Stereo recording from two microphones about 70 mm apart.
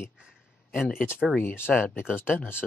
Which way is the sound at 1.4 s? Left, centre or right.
Left.